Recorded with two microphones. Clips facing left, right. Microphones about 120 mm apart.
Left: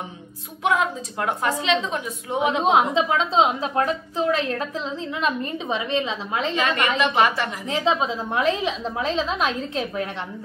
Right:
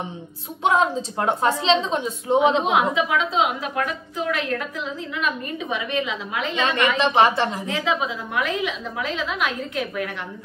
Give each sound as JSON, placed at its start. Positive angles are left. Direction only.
{"t": 0.7, "sound": "a woman's voice", "side_deg": -25}
{"t": 2.6, "sound": "a woman's voice", "side_deg": 30}
{"t": 6.6, "sound": "a woman's voice", "side_deg": -25}
{"t": 7.6, "sound": "a woman's voice", "side_deg": 30}